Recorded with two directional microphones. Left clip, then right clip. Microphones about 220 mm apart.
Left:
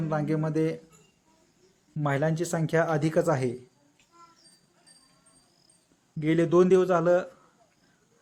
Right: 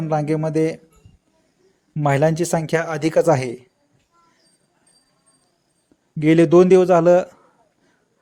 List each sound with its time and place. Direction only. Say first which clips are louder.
0.1 s speech: right 9 dB; 35° right (ahead or behind)
2.0 s speech: right 10 dB; 35° right (ahead or behind)
6.1 s speech: right 10 dB; 35° right (ahead or behind)